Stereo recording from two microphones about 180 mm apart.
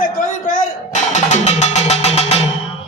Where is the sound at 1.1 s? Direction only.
40° left (ahead or behind).